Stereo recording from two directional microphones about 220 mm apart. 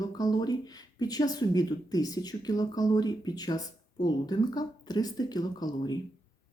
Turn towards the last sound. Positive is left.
turn(degrees=20)  # may be behind; listen again after turning